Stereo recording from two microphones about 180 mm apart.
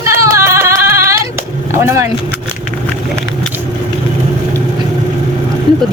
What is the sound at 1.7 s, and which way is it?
Speech, 15° right (ahead or behind).